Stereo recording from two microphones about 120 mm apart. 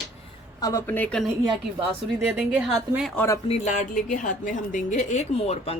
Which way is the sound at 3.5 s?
80° left.